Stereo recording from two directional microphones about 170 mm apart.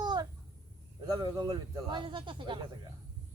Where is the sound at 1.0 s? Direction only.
20° right (ahead or behind).